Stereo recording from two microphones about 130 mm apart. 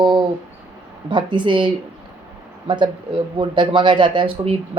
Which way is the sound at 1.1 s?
40° right (ahead or behind).